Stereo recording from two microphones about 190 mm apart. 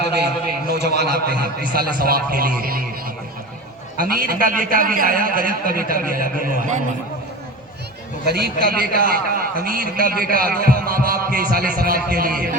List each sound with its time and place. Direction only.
0.0 s a man's voice: 60° right (ahead or behind)
3.9 s a man's voice: 50° right (ahead or behind)
8.3 s a man's voice: 55° right (ahead or behind)